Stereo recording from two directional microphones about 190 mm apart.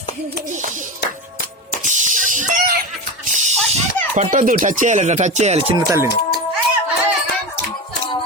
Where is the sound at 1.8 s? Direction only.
40° right (ahead or behind).